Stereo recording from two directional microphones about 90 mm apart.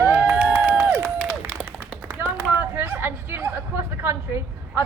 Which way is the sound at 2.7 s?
25° right (ahead or behind).